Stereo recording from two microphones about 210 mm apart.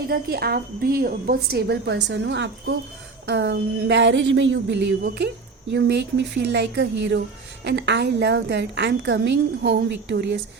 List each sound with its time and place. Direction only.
0.1 s a woman's voice: 45° right (ahead or behind)